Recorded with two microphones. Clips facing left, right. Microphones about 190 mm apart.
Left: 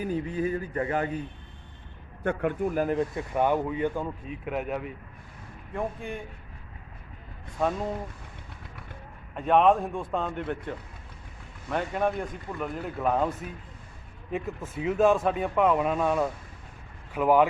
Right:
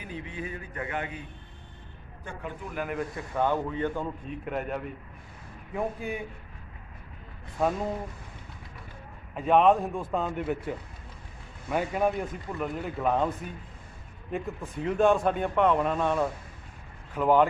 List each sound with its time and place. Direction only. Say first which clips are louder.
0.0 s speech: left 9 dB; 40° left (ahead or behind)
2.2 s a man's voice: left 12 dB; 65° left (ahead or behind); by 3.1 s 35° left (ahead or behind)
3.3 s speech: left 2 dB; 15° left (ahead or behind)
4.3 s speech: left 1 dB; centre (ahead or behind)
7.6 s speech: even; centre (ahead or behind)
9.3 s speech: even; centre (ahead or behind)